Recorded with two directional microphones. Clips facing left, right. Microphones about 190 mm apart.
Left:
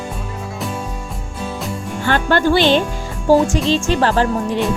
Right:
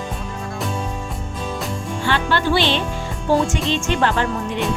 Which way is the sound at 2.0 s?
45° left (ahead or behind).